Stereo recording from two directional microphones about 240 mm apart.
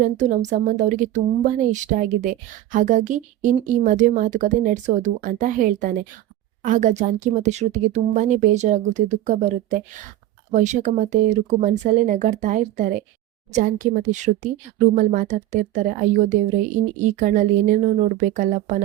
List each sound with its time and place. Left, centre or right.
0.0 s speech: right
17.0 s speech: right